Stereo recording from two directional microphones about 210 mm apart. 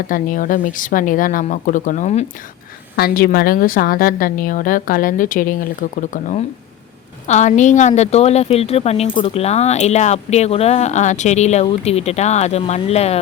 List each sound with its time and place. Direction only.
0.1 s speech: 40° left (ahead or behind)
2.9 s a woman's voice: 45° left (ahead or behind)